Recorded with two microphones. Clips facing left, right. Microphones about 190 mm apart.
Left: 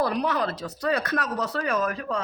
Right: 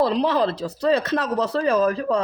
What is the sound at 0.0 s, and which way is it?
Speech, 25° right (ahead or behind).